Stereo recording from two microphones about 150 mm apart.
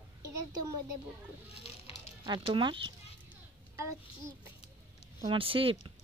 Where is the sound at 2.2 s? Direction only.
30° right (ahead or behind).